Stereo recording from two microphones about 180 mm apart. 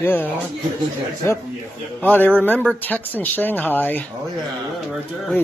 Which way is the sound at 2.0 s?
10° left (ahead or behind).